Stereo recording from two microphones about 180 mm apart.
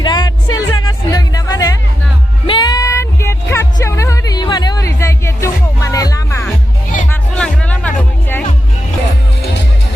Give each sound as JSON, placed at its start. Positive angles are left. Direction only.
{"t": 0.0, "sound": "music", "side_deg": 25}
{"t": 7.1, "sound": "music", "side_deg": 5}